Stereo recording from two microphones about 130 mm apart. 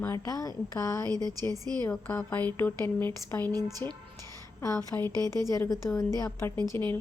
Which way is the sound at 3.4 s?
30° right (ahead or behind).